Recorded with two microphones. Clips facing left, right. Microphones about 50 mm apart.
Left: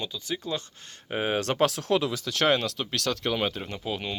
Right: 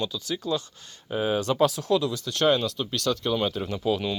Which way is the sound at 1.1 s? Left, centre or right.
Left.